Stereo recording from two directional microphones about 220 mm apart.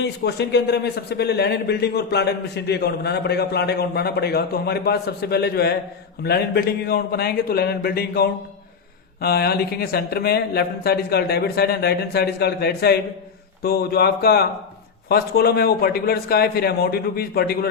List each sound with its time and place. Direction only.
0.0 s speech: 50° left (ahead or behind)